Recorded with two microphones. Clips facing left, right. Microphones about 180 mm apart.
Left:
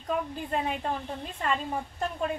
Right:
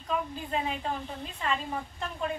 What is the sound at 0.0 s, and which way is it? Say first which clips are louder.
A woman's voice: left 2 dB; 50° left (ahead or behind).